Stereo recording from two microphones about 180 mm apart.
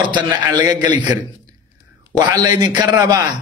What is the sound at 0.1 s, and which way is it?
Speech, 25° right (ahead or behind).